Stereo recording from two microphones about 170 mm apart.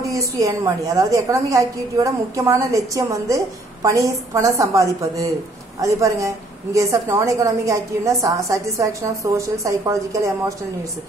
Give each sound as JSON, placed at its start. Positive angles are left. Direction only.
{"t": 0.1, "sound": "a woman's voice", "side_deg": -20}